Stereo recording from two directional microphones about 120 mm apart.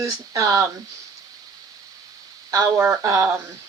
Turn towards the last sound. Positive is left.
turn(degrees=-25)  # may be behind; listen again after turning